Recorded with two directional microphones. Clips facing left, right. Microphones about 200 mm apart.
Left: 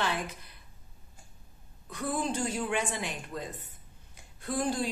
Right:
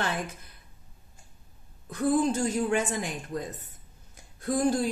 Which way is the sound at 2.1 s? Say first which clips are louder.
Right 4 dB; 45° right (ahead or behind).